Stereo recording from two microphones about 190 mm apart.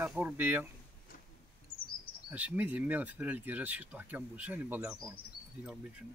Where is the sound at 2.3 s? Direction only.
10° right (ahead or behind).